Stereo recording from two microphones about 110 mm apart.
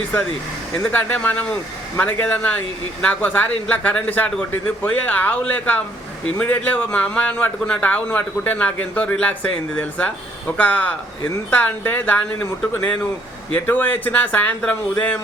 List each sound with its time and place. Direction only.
0.8 s a man's voice: 15° left (ahead or behind)